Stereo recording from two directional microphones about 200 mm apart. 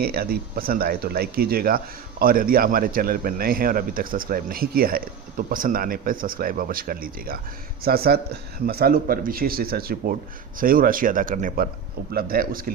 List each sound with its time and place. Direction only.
0.0 s speech: 50° right (ahead or behind)